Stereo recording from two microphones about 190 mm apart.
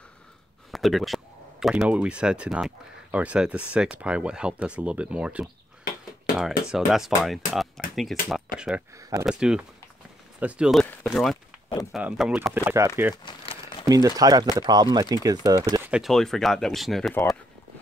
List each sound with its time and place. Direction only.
0.7 s speech: centre (ahead or behind)
6.7 s speech: centre (ahead or behind)
13.1 s crumpling: 25° left (ahead or behind)
13.8 s speech: 20° right (ahead or behind); by 17.4 s 5° left (ahead or behind)